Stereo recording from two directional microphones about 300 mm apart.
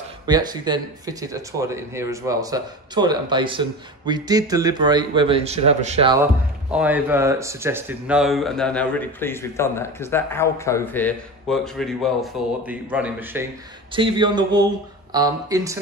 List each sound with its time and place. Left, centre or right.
0.3 s speech: centre
6.7 s speech: centre